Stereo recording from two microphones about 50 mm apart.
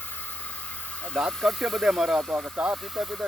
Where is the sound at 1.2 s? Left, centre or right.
Centre.